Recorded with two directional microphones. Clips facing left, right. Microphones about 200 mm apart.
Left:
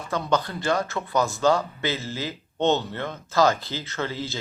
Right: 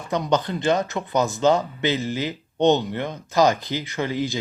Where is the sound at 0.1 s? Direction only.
20° right (ahead or behind).